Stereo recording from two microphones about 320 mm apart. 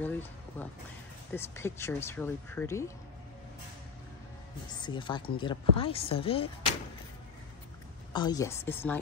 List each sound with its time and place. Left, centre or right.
0.0 s music: centre
1.3 s speech: centre
4.8 s speech: centre
8.1 s speech: centre